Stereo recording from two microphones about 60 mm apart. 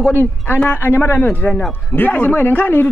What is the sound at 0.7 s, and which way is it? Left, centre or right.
Speech, left.